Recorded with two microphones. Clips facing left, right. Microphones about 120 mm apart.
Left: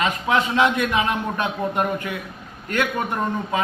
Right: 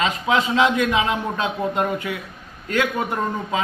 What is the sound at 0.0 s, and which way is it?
A man's voice, 15° right (ahead or behind).